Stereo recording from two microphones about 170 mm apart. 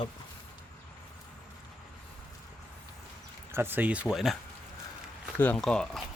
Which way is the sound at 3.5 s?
15° right (ahead or behind).